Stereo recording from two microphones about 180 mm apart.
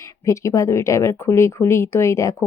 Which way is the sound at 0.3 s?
15° left (ahead or behind).